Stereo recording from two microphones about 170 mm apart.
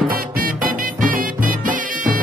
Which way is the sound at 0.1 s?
60° right (ahead or behind).